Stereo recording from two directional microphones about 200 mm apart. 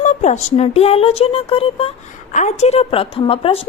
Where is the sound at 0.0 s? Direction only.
40° left (ahead or behind).